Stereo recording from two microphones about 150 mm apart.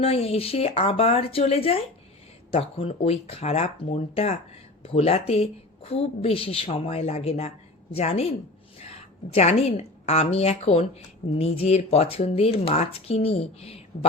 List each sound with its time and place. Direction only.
0.0 s a woman's voice: 40° left (ahead or behind)